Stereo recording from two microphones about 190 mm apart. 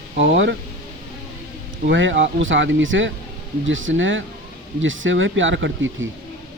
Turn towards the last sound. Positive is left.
turn(degrees=-85)